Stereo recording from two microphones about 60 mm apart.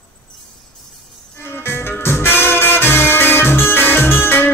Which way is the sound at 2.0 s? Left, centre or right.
Left.